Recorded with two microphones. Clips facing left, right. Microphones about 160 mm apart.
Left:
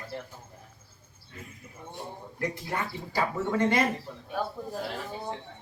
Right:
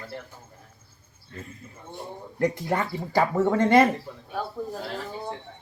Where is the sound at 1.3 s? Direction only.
10° left (ahead or behind).